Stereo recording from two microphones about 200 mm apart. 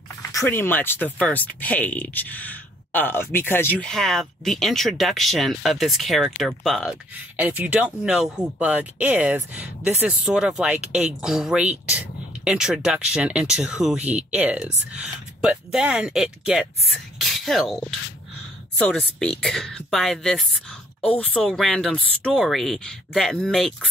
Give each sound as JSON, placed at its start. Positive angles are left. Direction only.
{"t": 0.3, "sound": "speech", "side_deg": 15}
{"t": 18.8, "sound": "speech", "side_deg": 5}